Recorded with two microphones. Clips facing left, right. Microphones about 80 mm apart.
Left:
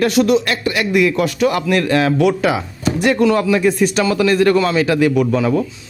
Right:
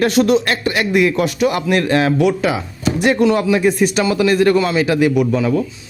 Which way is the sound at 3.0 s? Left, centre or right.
Right.